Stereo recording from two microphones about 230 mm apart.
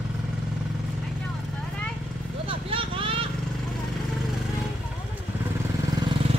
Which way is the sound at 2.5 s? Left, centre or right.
Right.